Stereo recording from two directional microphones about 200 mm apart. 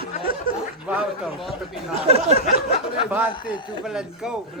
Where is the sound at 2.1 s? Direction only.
30° right (ahead or behind).